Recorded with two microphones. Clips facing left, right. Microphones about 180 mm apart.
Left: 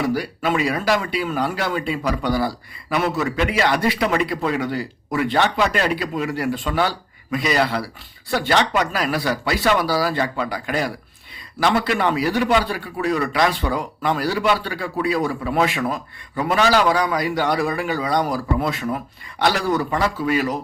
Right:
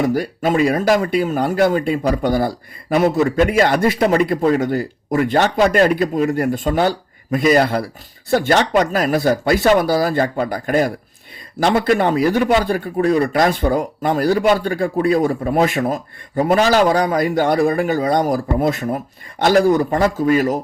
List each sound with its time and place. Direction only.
0.0 s a man's voice: 45° right (ahead or behind)